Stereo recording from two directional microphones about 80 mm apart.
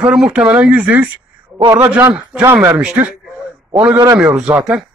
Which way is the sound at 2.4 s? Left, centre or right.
Right.